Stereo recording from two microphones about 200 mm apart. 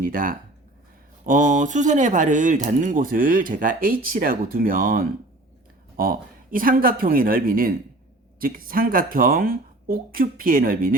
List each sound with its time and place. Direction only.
0.0 s speech: 45° right (ahead or behind)